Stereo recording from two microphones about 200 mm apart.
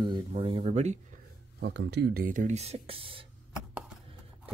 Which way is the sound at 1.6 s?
60° right (ahead or behind).